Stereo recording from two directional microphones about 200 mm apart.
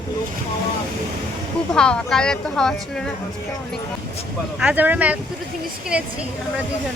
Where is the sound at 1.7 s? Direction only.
5° left (ahead or behind).